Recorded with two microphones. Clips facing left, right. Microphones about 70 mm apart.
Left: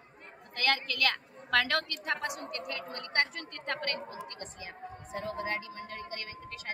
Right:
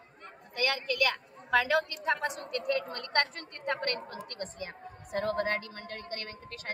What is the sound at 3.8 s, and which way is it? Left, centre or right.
Speech, right.